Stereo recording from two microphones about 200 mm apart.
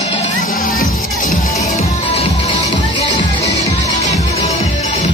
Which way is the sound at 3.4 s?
35° left (ahead or behind).